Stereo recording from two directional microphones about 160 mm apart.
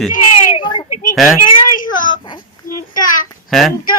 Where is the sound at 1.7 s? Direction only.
55° left (ahead or behind).